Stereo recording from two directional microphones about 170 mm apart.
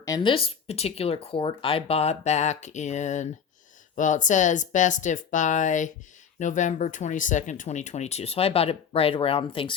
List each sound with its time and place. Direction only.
0.0 s speech: 25° left (ahead or behind)